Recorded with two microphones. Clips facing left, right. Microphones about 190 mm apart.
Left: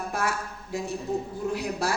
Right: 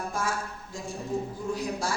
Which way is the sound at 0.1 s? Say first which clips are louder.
Left 2 dB; 65° left (ahead or behind).